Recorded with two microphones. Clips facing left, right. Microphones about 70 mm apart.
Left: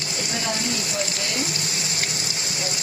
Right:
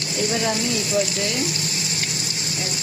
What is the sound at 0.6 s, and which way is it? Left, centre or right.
Speech, left.